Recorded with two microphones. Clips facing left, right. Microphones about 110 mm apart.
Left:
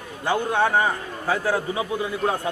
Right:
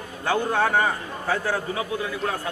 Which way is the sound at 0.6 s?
5° left (ahead or behind).